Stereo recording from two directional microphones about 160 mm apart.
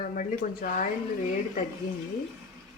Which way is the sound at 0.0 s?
60° left (ahead or behind).